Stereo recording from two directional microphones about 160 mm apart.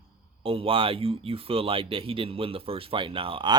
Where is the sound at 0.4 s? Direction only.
35° right (ahead or behind).